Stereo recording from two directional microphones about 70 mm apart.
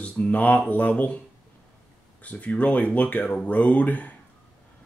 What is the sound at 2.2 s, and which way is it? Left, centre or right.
Speech, left.